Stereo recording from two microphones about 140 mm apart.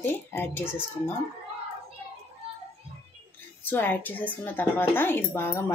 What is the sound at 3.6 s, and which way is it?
Speech, 15° left (ahead or behind).